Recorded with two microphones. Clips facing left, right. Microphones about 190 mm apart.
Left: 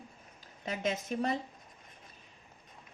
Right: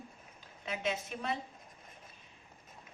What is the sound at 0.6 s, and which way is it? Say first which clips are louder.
Speech: left 2 dB; 40° left (ahead or behind).